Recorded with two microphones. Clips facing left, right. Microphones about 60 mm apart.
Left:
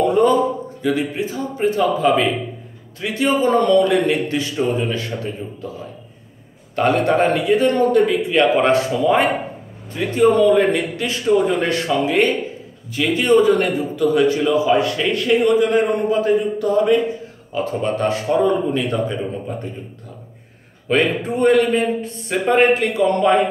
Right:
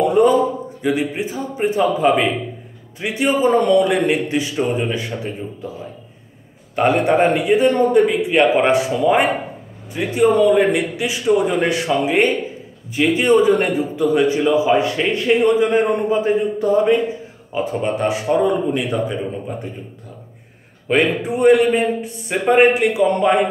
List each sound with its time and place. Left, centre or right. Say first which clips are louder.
0.0 s a sound: right 1 dB; centre
2.0 s a man's voice: right 1 dB; right
6.7 s a man's voice: right 1 dB; right
20.9 s a man's voice: right 1 dB; centre